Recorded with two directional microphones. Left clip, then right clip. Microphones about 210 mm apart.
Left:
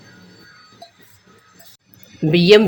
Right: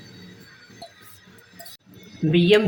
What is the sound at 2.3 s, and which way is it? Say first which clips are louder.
Speech: left 6 dB; 50° left (ahead or behind).